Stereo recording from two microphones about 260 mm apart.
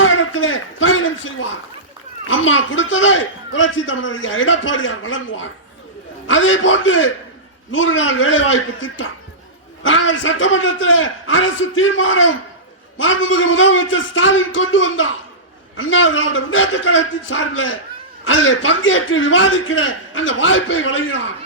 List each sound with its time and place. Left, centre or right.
0.0 s a man's voice: left